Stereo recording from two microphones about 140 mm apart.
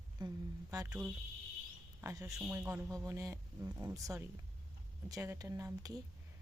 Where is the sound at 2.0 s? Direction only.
25° right (ahead or behind).